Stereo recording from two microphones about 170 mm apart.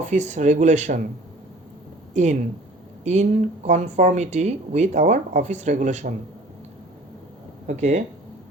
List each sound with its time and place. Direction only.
0.1 s speech: 45° right (ahead or behind)
2.1 s speech: 45° right (ahead or behind)
7.7 s speech: 45° right (ahead or behind)